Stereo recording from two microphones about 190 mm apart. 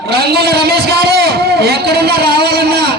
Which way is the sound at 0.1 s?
55° right (ahead or behind).